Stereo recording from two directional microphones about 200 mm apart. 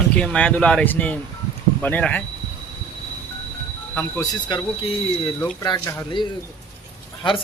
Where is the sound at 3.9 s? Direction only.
20° left (ahead or behind).